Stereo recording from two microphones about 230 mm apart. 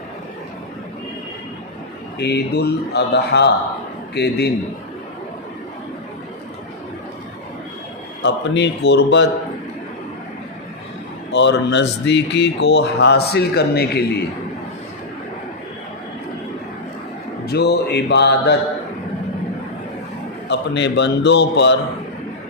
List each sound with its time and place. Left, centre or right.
2.1 s speech: left
8.2 s speech: left
11.3 s speech: left
17.4 s speech: left
20.5 s speech: left